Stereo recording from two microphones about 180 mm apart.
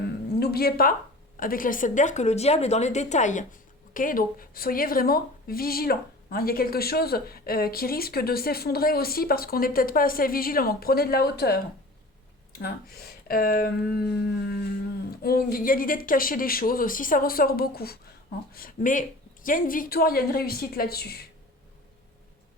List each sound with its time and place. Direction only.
0.0 s a sound: 60° left (ahead or behind)
1.4 s a woman's voice: 50° left (ahead or behind)
15.1 s speech: 60° left (ahead or behind)
18.5 s a woman's voice: 50° left (ahead or behind)